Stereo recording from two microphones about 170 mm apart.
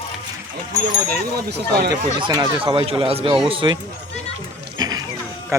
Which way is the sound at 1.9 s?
25° right (ahead or behind).